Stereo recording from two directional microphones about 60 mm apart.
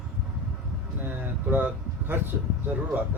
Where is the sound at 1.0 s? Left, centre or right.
Right.